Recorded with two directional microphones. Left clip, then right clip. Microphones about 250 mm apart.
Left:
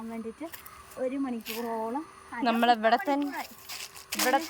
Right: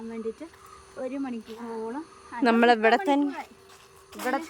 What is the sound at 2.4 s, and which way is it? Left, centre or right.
Speech, centre.